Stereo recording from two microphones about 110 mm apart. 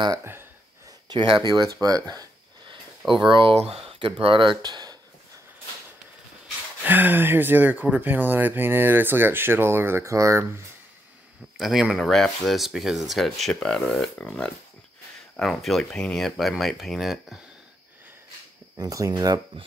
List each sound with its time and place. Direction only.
0.2 s speech: 20° right (ahead or behind)
1.0 s speech: 45° right (ahead or behind)
3.3 s speech: 50° right (ahead or behind)
3.5 s speech: 60° right (ahead or behind); by 4.9 s 40° right (ahead or behind)
6.8 s speech: 15° right (ahead or behind)
11.5 s speech: 5° right (ahead or behind)
18.8 s speech: 30° right (ahead or behind)